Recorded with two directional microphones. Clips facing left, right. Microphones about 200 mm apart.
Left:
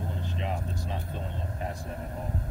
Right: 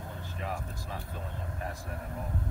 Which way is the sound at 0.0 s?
20° left (ahead or behind).